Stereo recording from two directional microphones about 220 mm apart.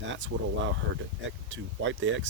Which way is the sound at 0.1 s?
60° right (ahead or behind).